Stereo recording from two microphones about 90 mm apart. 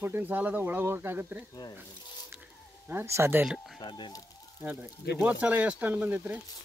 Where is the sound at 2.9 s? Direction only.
30° right (ahead or behind).